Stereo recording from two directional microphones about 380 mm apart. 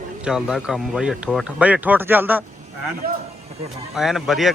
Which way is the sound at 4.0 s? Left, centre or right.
Centre.